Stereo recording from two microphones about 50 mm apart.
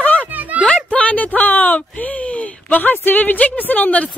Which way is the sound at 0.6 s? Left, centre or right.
Left.